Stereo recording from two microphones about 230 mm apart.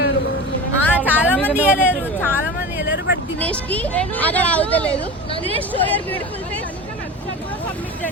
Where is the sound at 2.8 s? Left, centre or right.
Left.